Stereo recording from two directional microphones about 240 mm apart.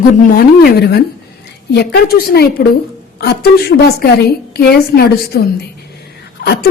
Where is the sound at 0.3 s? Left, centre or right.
Left.